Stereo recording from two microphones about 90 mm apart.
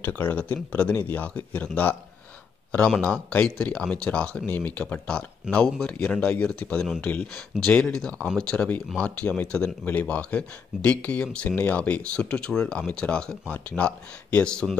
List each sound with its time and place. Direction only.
0.0 s speech: 20° left (ahead or behind)
3.0 s speech: 15° left (ahead or behind)
7.3 s speech: 5° left (ahead or behind)